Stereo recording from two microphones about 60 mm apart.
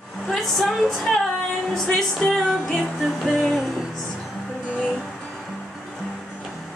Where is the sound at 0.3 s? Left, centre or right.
Centre.